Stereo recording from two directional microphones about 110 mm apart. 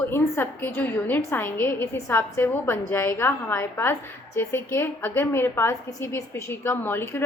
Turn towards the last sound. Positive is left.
turn(degrees=20)  # may be behind; listen again after turning